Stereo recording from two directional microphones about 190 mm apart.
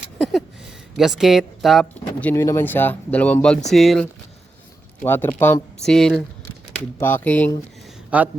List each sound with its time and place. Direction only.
0.0 s a sound: centre (ahead or behind)
0.9 s speech: centre (ahead or behind)
2.3 s speech: 15° left (ahead or behind)
8.1 s speech: 5° right (ahead or behind)